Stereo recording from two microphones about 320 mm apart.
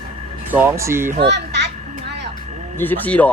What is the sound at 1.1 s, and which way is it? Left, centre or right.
Children playing, right.